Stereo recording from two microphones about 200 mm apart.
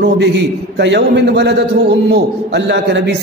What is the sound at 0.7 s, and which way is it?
A man's voice, 60° right (ahead or behind).